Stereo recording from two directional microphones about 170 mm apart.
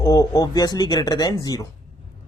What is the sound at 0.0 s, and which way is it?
A man's voice, 20° left (ahead or behind).